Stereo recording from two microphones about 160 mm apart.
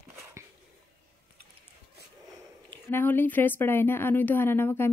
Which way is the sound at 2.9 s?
10° left (ahead or behind).